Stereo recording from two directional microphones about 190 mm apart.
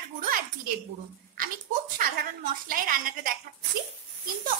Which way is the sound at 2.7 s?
50° right (ahead or behind).